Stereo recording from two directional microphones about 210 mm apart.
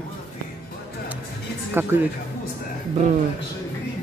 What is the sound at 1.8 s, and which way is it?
Speech, 10° right (ahead or behind).